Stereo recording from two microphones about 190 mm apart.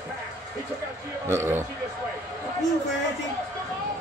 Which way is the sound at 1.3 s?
10° right (ahead or behind).